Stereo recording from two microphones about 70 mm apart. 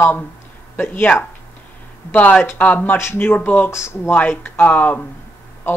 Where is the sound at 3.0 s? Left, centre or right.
Left.